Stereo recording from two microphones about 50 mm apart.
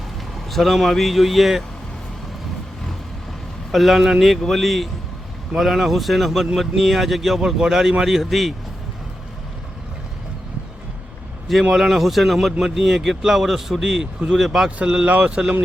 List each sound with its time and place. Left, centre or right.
0.5 s a man's voice: centre
3.7 s a man's voice: centre
11.7 s speech: centre
15.2 s speech: centre